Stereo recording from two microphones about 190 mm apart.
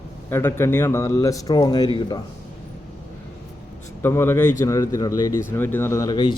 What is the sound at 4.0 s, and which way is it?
Speech, 10° left (ahead or behind).